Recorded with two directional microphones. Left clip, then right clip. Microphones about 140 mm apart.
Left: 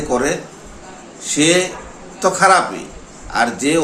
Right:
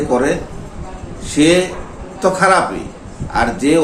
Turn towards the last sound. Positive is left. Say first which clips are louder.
# right 2 dB
turn(degrees=20)  # may be behind; listen again after turning